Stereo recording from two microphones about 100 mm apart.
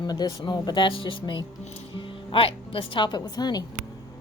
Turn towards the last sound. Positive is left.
turn(degrees=45)  # may be behind; listen again after turning